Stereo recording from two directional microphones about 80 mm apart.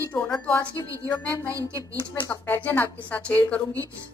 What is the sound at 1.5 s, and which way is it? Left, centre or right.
Speech, right.